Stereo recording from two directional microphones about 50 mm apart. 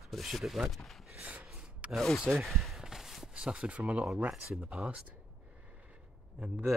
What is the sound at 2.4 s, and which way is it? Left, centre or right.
Walk, centre.